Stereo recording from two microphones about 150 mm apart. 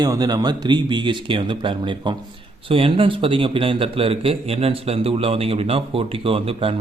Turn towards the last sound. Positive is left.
turn(degrees=-40)  # may be behind; listen again after turning